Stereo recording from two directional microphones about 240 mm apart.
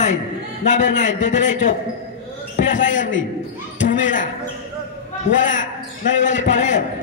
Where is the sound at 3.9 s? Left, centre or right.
Left.